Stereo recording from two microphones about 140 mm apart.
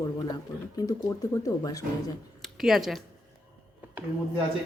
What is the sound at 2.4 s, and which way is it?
Speech, centre (ahead or behind).